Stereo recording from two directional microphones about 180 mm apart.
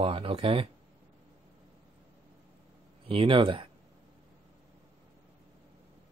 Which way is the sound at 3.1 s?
30° right (ahead or behind).